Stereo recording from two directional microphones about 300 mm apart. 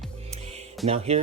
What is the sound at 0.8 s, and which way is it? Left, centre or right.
Speech, right.